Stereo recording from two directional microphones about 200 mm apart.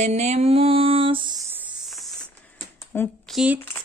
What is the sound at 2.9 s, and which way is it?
Speech, centre (ahead or behind).